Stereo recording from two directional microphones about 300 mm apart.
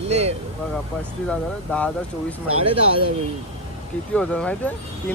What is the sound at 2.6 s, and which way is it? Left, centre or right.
Speech, centre.